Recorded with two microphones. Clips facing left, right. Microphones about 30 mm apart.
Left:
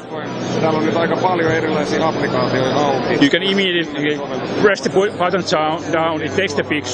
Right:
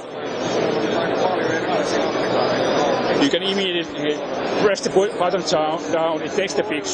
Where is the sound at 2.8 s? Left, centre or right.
Left.